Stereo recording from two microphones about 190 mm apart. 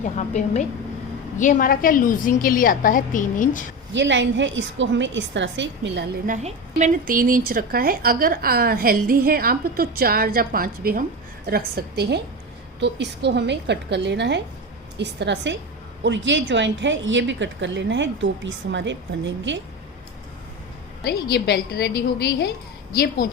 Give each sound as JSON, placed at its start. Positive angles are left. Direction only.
{"t": 0.0, "sound": "a woman's voice", "side_deg": 40}
{"t": 3.9, "sound": "a woman's voice", "side_deg": -70}
{"t": 6.2, "sound": "a woman's voice", "side_deg": -40}
{"t": 21.0, "sound": "a woman's voice", "side_deg": 60}
{"t": 23.0, "sound": "a woman's voice", "side_deg": 45}